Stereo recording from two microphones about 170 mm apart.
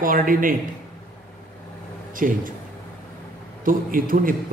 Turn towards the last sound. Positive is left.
turn(degrees=-55)  # may be behind; listen again after turning